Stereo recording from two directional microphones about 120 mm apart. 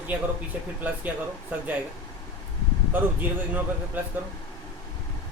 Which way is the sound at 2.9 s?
15° right (ahead or behind).